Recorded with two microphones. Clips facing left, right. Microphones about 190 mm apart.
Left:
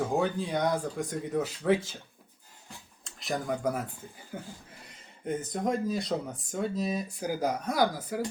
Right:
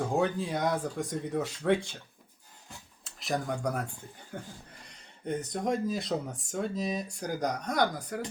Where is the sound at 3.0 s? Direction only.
Centre (ahead or behind).